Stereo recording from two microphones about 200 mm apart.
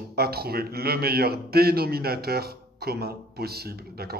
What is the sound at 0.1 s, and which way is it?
A man's voice, 50° right (ahead or behind).